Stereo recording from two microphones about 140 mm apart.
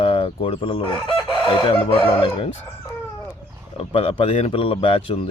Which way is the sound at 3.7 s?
45° left (ahead or behind).